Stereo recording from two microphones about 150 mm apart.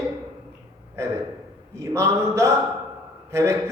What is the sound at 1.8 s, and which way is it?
A man's voice, 20° right (ahead or behind).